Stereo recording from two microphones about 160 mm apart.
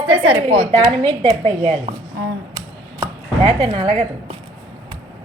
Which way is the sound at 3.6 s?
35° right (ahead or behind).